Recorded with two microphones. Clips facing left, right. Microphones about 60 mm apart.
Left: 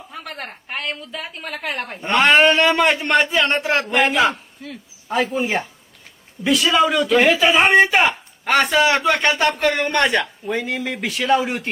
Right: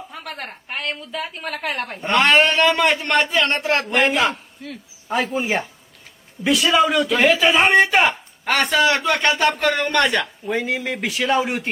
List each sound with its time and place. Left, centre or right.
0.1 s a woman's voice: centre
3.8 s a woman's voice: centre
8.7 s speech: centre
10.4 s a woman's voice: centre